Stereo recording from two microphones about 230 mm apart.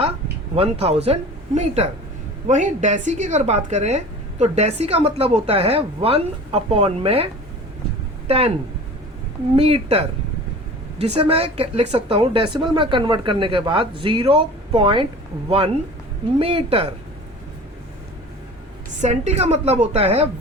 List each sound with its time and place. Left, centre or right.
0.5 s speech: right
8.3 s speech: right
9.6 s speech: right
19.0 s speech: right